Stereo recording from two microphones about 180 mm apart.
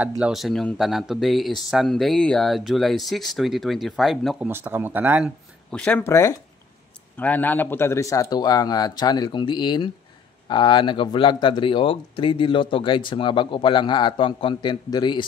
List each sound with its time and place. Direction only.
0.2 s speech: centre (ahead or behind)
4.5 s speech: 10° right (ahead or behind)
5.7 s a man's voice: 5° left (ahead or behind); by 15.2 s 25° left (ahead or behind)